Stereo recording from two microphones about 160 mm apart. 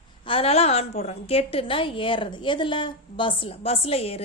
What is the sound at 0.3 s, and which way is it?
A woman's voice, 35° left (ahead or behind).